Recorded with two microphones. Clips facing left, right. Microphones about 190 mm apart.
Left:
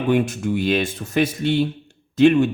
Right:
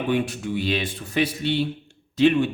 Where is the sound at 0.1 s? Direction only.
45° left (ahead or behind).